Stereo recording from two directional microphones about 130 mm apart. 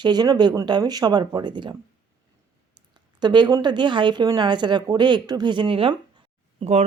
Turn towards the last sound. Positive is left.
turn(degrees=-55)  # may be behind; listen again after turning